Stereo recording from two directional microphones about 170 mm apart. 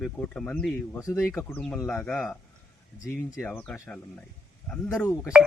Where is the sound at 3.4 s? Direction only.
10° left (ahead or behind).